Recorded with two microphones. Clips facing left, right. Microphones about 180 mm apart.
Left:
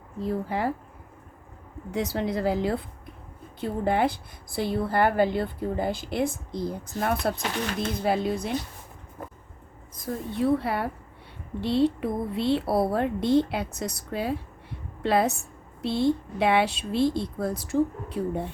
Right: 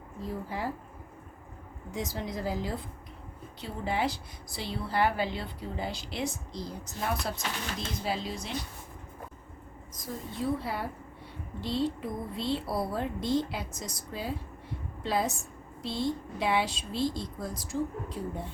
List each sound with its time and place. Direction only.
0.2 s speech: 65° left (ahead or behind)
1.9 s a woman's voice: 65° left (ahead or behind)
9.9 s a woman's voice: 60° left (ahead or behind)